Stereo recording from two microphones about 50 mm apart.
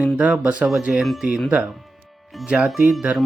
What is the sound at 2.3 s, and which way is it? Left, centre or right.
Speech, centre.